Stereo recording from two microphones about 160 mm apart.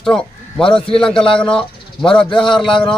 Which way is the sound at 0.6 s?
35° left (ahead or behind).